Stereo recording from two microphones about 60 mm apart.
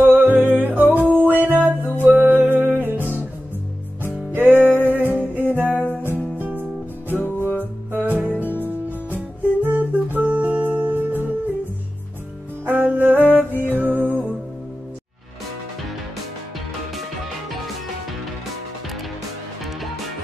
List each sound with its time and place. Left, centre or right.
0.0 s music: right
4.3 s music: right
5.7 s music: left
6.1 s music: right
8.3 s music: left
9.6 s music: right
12.6 s music: right
13.5 s music: left
13.7 s music: right